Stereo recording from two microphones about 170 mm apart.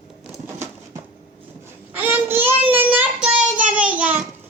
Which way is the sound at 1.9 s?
10° right (ahead or behind).